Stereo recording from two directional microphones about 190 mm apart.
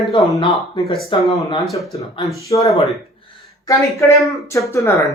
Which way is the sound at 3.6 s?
15° left (ahead or behind).